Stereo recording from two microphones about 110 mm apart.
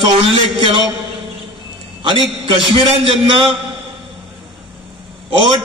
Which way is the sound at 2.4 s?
55° right (ahead or behind).